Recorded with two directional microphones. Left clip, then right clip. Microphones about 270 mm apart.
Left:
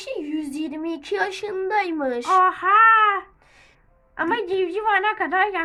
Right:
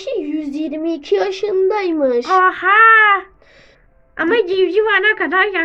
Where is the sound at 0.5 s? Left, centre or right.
Left.